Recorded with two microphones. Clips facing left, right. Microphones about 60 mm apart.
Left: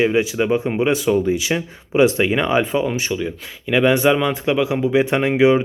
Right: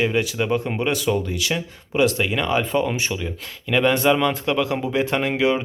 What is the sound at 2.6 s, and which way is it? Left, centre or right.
Speech, centre.